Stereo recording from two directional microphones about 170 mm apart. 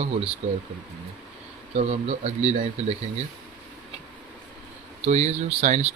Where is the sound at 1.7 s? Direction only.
40° right (ahead or behind).